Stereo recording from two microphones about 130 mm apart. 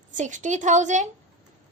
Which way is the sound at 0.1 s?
75° right (ahead or behind).